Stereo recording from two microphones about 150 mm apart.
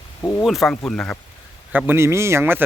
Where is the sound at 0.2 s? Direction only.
15° left (ahead or behind).